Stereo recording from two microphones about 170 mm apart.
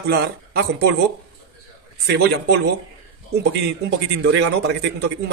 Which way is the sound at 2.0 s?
70° right (ahead or behind).